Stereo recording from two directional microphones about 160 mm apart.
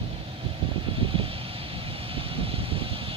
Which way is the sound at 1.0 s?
35° right (ahead or behind).